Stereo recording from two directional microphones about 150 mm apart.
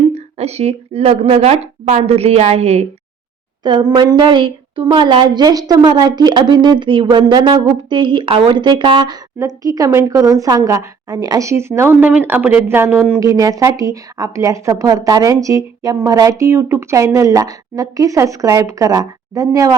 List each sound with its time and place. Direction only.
0.1 s a woman's voice: 45° right (ahead or behind)
3.6 s a woman's voice: 30° right (ahead or behind); by 13.1 s 10° right (ahead or behind)
13.1 s a woman's voice: 25° right (ahead or behind)